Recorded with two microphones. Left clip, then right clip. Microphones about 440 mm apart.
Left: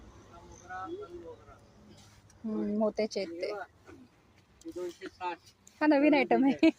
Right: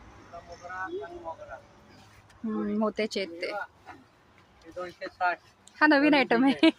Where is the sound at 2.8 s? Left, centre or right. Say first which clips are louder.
Right 1 dB; left.